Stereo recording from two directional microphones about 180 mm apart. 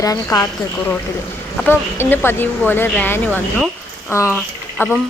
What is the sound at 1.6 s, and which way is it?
A woman's voice, 10° left (ahead or behind).